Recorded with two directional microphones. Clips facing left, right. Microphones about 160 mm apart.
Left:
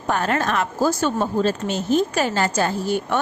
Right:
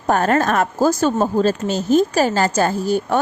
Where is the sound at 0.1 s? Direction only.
45° right (ahead or behind).